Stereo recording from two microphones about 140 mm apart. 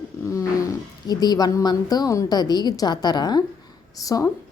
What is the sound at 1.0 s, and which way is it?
A woman's voice, 30° left (ahead or behind).